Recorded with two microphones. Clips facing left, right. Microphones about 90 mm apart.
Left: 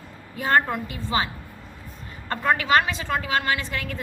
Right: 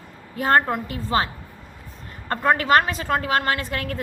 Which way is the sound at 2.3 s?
45° right (ahead or behind).